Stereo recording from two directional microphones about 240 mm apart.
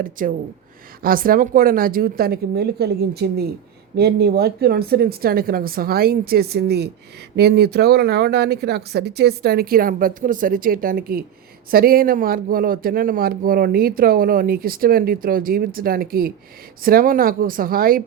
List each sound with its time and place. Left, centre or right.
0.0 s speech: right